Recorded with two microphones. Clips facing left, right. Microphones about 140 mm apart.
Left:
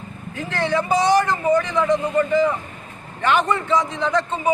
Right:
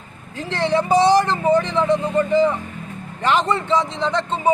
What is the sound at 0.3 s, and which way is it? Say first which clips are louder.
A man's voice: right 2 dB; 30° right (ahead or behind).